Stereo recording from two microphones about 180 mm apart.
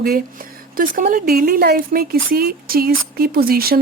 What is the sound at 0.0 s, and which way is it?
A woman's voice, 55° right (ahead or behind).